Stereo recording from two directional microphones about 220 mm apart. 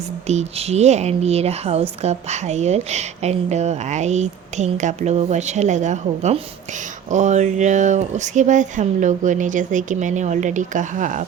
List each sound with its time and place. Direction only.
0.3 s speech: 30° right (ahead or behind)